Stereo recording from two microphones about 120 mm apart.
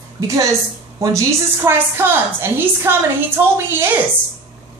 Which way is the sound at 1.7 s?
20° right (ahead or behind).